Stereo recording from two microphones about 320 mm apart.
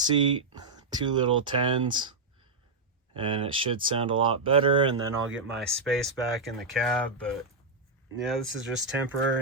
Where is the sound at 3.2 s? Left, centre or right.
Centre.